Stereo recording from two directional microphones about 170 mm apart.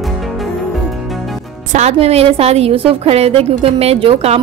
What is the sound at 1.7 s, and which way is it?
Speech, 40° right (ahead or behind).